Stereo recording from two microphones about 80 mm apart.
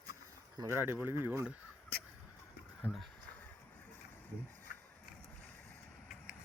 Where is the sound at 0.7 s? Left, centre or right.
Right.